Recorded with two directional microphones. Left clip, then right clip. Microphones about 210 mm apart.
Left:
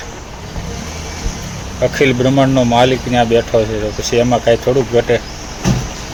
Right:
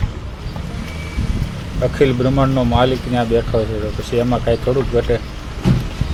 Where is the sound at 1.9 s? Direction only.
Centre (ahead or behind).